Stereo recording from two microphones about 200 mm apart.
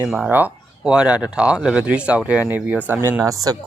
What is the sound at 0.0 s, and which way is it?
Speech, 5° right (ahead or behind).